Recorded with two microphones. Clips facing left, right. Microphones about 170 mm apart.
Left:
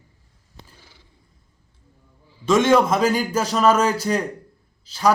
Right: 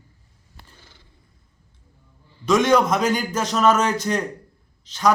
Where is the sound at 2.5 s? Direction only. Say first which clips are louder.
Left 1 dB; centre (ahead or behind).